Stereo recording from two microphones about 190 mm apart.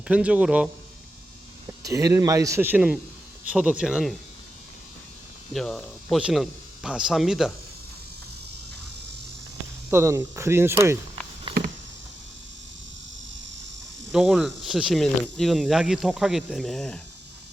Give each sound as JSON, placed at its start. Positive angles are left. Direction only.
{"t": 0.1, "sound": "a man's voice", "side_deg": -5}
{"t": 1.6, "sound": "a man's voice", "side_deg": -15}
{"t": 5.5, "sound": "speech", "side_deg": 0}
{"t": 9.9, "sound": "a man's voice", "side_deg": -15}
{"t": 11.5, "sound": "a sound", "side_deg": -30}
{"t": 14.1, "sound": "speech", "side_deg": 0}